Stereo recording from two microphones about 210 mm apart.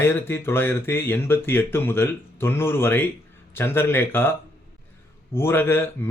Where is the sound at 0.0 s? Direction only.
10° left (ahead or behind).